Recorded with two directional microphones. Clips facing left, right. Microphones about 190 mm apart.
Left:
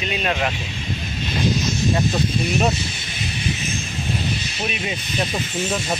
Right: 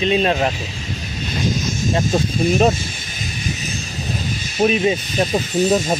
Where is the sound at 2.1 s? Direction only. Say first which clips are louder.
Right 4 dB; 50° right (ahead or behind).